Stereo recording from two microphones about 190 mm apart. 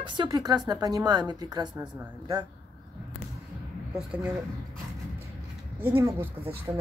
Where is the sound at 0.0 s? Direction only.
25° right (ahead or behind).